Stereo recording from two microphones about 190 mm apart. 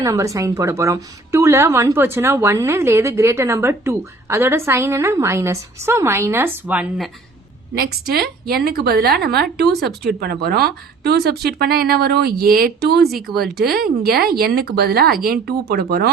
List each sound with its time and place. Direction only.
0.0 s a woman's voice: 15° right (ahead or behind)
7.8 s speech: 55° right (ahead or behind)
13.1 s speech: centre (ahead or behind)
13.4 s speech: 55° right (ahead or behind)